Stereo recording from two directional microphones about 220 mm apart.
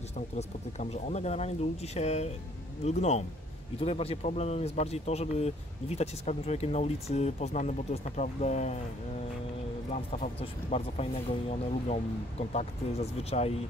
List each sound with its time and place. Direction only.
0.4 s speech: 30° left (ahead or behind)
9.9 s speech: 30° left (ahead or behind)